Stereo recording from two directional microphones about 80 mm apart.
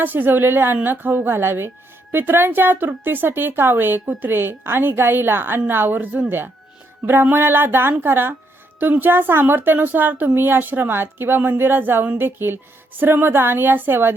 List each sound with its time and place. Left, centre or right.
0.0 s speech: right